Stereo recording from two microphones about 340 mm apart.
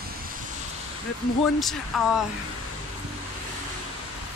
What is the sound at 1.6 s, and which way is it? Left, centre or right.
Speech, centre.